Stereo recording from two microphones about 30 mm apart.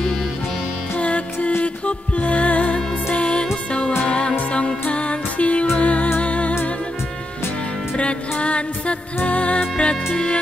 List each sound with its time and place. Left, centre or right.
0.9 s music: left
8.0 s music: left